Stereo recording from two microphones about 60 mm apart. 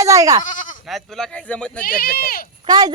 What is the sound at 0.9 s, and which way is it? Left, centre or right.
Speech, centre.